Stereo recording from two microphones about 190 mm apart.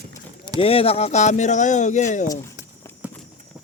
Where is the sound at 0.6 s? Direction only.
30° left (ahead or behind).